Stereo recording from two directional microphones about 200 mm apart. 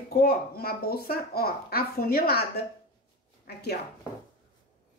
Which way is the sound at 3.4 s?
55° left (ahead or behind).